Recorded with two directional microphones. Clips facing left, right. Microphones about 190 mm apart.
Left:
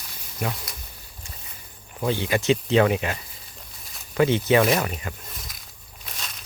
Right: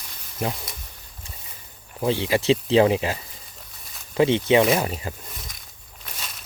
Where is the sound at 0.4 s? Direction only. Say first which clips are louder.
Right 2 dB; 30° right (ahead or behind).